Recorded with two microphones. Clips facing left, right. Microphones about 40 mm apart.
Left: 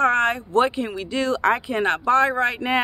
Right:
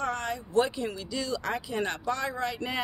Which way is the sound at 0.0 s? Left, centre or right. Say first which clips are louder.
Left 12 dB; left.